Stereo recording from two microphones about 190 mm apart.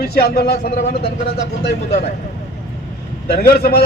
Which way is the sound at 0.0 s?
55° left (ahead or behind).